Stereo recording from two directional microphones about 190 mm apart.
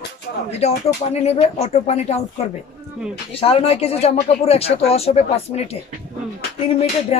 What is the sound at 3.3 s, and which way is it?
Speech, 30° left (ahead or behind).